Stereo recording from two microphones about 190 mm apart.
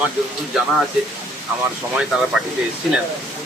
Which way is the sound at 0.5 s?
Centre (ahead or behind).